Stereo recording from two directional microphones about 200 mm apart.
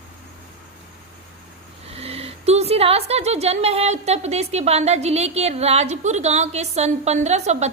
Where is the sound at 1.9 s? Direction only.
30° right (ahead or behind).